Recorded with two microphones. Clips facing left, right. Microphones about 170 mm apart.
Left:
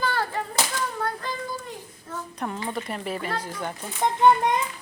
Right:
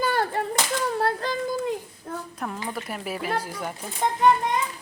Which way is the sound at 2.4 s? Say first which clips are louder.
Left 4 dB; centre (ahead or behind).